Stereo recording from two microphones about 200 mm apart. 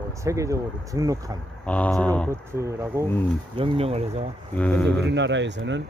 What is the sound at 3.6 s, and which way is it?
Speech, 30° right (ahead or behind).